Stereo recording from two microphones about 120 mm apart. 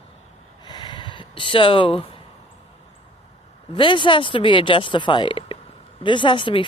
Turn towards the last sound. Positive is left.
turn(degrees=45)  # may be behind; listen again after turning